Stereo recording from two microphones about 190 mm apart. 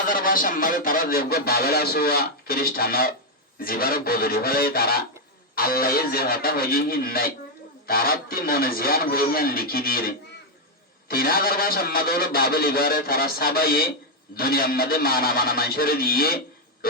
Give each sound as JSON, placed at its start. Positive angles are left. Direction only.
{"t": 0.0, "sound": "speech", "side_deg": 50}